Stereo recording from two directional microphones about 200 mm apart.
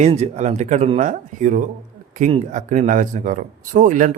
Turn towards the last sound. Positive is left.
turn(degrees=-40)  # may be behind; listen again after turning